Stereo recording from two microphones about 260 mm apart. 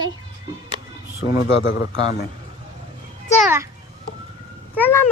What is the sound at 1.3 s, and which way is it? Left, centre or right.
Speech, left.